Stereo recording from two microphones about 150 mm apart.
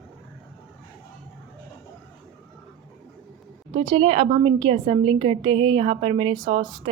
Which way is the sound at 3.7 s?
30° right (ahead or behind).